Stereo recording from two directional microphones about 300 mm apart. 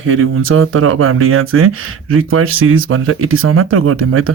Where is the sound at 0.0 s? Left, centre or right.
Right.